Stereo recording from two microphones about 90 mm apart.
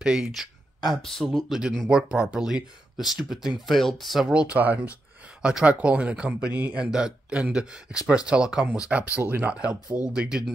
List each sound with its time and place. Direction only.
0.0 s speech: 10° right (ahead or behind)
4.3 s speech: 15° right (ahead or behind)